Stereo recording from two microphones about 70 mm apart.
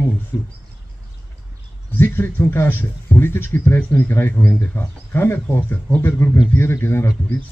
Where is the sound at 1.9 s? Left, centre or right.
Left.